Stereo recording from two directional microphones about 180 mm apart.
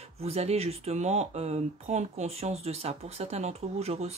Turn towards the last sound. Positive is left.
turn(degrees=-35)  # may be behind; listen again after turning